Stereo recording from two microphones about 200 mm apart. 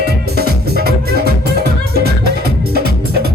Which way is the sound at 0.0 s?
50° right (ahead or behind).